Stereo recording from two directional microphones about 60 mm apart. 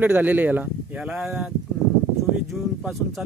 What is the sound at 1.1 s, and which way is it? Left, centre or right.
Speech, centre.